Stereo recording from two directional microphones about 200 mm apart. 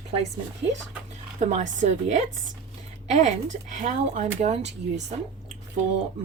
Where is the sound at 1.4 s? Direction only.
35° right (ahead or behind).